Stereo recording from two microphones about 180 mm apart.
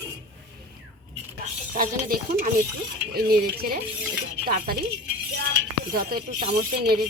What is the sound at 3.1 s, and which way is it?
Stir, 55° right (ahead or behind).